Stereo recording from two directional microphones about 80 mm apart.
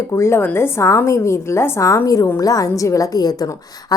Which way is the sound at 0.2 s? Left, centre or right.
Left.